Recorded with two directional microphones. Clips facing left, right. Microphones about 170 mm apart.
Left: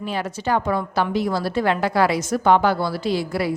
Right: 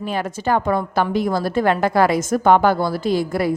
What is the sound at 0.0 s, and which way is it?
A woman's voice, 50° right (ahead or behind).